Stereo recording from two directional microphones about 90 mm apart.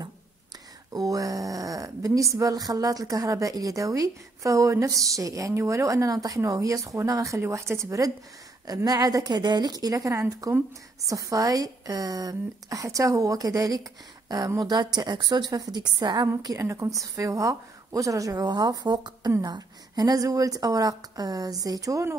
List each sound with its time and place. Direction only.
0.9 s a sound: 40° right (ahead or behind)
2.3 s a woman's voice: 45° right (ahead or behind)
16.5 s a woman's voice: 35° right (ahead or behind)